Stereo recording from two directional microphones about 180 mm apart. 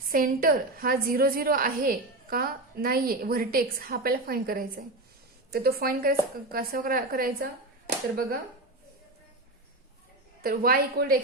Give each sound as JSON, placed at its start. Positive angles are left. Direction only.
{"t": 0.1, "sound": "a woman's voice", "side_deg": -50}
{"t": 10.4, "sound": "speech", "side_deg": -55}